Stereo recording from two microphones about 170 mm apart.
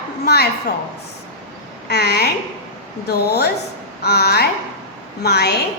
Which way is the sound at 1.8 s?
70° left (ahead or behind).